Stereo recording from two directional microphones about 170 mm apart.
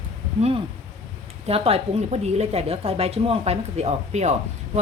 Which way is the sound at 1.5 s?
35° right (ahead or behind).